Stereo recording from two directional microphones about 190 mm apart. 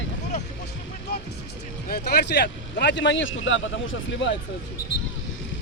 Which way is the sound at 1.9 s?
60° left (ahead or behind).